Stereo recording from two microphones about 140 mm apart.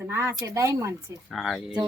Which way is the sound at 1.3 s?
Centre (ahead or behind).